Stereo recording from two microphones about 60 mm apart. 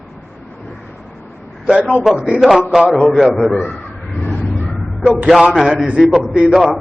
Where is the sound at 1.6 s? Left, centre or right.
Centre.